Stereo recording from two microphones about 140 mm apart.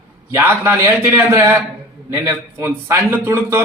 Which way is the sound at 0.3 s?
20° right (ahead or behind).